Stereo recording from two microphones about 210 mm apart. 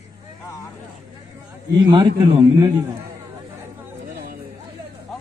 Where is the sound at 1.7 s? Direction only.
20° right (ahead or behind).